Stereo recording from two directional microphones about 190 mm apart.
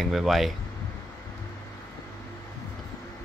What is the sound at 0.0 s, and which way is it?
Speech, centre (ahead or behind).